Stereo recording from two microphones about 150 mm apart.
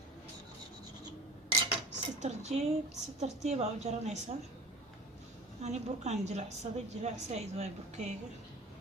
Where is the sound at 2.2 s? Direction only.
45° right (ahead or behind).